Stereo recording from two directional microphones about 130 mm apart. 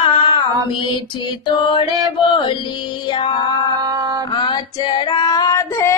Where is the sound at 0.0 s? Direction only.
40° left (ahead or behind).